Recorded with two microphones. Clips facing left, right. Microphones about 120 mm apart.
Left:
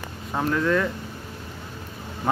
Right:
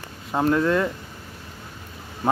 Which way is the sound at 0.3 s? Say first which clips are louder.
Right 3 dB; 15° right (ahead or behind).